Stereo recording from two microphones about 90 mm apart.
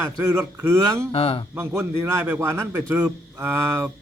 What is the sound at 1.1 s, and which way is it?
Speech, 90° left.